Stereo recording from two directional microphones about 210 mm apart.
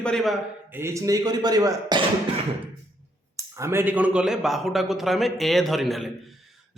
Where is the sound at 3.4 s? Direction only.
15° right (ahead or behind).